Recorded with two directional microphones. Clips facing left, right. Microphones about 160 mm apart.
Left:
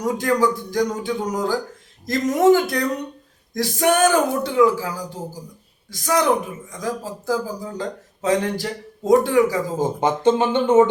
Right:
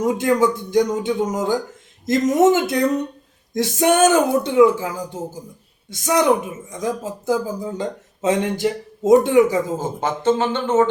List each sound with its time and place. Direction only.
0.0 s speech: 25° right (ahead or behind)
10.0 s speech: 15° left (ahead or behind)